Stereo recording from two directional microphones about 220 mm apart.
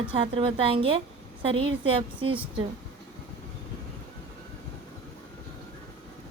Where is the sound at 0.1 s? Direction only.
25° right (ahead or behind).